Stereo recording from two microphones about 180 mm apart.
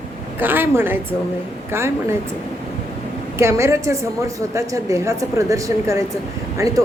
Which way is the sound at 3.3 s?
15° right (ahead or behind).